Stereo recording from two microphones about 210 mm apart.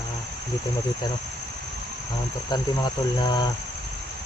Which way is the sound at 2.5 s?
20° left (ahead or behind).